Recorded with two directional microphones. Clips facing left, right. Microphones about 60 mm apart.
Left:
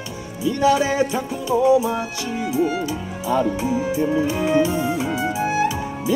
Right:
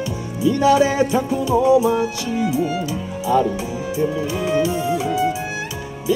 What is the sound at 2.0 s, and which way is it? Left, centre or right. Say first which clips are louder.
Music: right 4 dB; left.